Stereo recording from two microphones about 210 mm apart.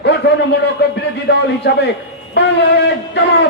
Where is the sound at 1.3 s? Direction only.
55° left (ahead or behind).